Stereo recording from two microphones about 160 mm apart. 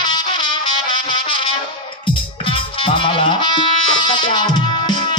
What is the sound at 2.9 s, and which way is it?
Music, 30° left (ahead or behind).